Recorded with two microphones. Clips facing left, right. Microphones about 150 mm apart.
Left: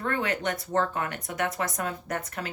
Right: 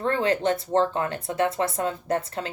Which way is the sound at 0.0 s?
30° right (ahead or behind).